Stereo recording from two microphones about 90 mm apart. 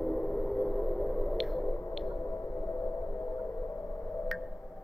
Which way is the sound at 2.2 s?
35° left (ahead or behind).